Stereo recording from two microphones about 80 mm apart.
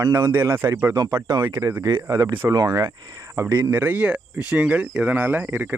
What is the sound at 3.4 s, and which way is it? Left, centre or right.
Speech, right.